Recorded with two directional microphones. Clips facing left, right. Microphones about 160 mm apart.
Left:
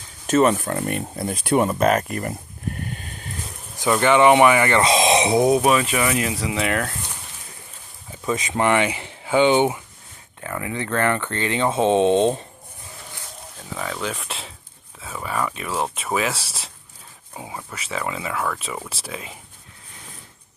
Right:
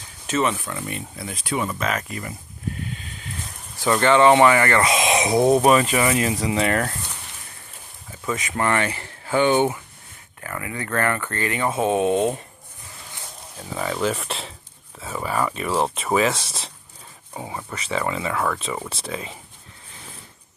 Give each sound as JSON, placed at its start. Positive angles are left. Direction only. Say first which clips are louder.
{"t": 0.3, "sound": "speech", "louder": "left 6 dB", "side_deg": 45}
{"t": 1.7, "sound": "a sound", "louder": "left 7 dB", "side_deg": 45}
{"t": 4.0, "sound": "speech", "louder": "even", "side_deg": 15}
{"t": 4.9, "sound": "a sound", "louder": "left 3 dB", "side_deg": 30}
{"t": 5.5, "sound": "speech", "louder": "right 2 dB", "side_deg": 0}
{"t": 8.3, "sound": "speech", "louder": "left 3 dB", "side_deg": 20}
{"t": 13.7, "sound": "speech", "louder": "right 4 dB", "side_deg": -5}